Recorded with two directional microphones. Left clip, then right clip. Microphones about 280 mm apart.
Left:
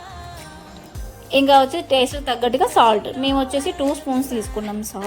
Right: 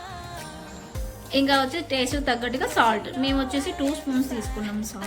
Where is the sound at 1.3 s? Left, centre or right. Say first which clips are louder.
Left 8 dB; left.